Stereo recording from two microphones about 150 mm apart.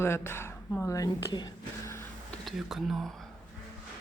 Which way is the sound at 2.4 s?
Centre (ahead or behind).